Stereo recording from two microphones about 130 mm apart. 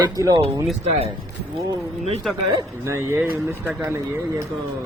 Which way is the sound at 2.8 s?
20° right (ahead or behind).